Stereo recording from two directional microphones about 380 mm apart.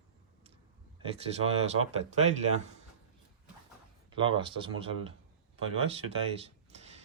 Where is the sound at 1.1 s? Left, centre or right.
Centre.